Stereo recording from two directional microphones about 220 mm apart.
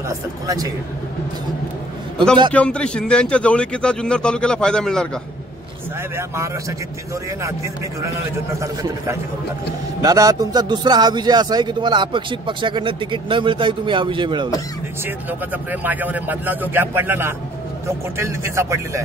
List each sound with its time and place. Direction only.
0.1 s a man's voice: 15° right (ahead or behind)
2.5 s a man's voice: 5° left (ahead or behind)
6.1 s a man's voice: 15° right (ahead or behind)
15.0 s a man's voice: 10° right (ahead or behind)